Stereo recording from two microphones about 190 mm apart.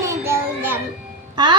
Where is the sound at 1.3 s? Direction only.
25° right (ahead or behind).